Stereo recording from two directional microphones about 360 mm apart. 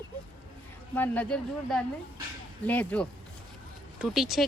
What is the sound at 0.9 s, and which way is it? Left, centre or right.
Speech, centre.